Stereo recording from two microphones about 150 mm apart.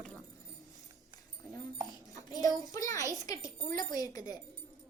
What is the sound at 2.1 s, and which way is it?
Speech, 25° left (ahead or behind).